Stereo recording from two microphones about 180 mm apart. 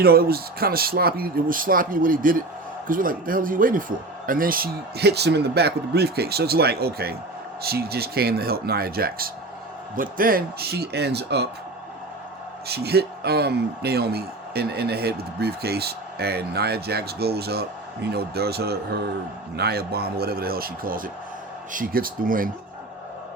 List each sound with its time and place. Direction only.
0.0 s a man's voice: 60° right (ahead or behind)
12.6 s a man's voice: 60° right (ahead or behind)